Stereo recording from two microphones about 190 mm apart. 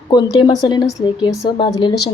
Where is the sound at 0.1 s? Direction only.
20° left (ahead or behind).